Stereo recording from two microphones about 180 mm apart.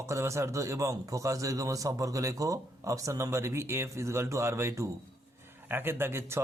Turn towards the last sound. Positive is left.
turn(degrees=-15)  # may be behind; listen again after turning